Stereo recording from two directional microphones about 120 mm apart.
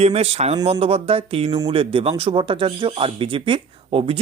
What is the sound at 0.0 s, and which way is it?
Speech, 60° right (ahead or behind).